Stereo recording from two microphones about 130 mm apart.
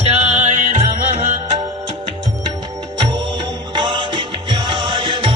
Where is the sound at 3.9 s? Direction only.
40° right (ahead or behind).